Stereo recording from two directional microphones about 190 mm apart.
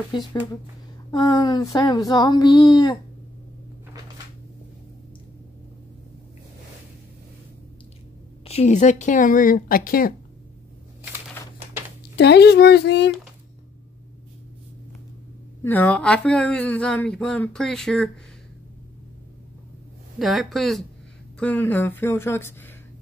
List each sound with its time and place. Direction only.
0.1 s speech: 25° left (ahead or behind)
8.5 s speech: 35° left (ahead or behind)
12.2 s speech: 60° left (ahead or behind)
15.6 s speech: 10° left (ahead or behind)
20.2 s speech: centre (ahead or behind)